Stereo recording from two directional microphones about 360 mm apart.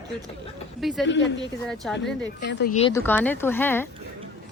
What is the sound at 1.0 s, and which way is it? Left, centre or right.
Speech, left.